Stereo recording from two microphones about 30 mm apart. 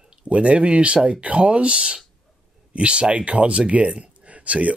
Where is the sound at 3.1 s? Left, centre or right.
Right.